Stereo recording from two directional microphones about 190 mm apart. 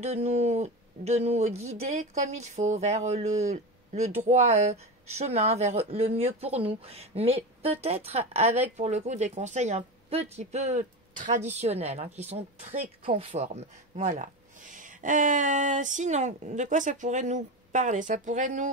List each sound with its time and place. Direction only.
0.0 s speech: 35° right (ahead or behind)